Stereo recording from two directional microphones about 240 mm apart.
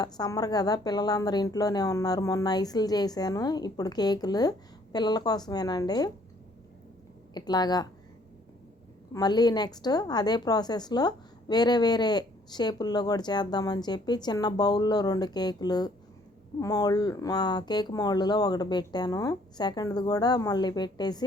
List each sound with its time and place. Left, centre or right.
0.0 s a woman's voice: centre
7.3 s a woman's voice: centre
9.1 s a woman's voice: centre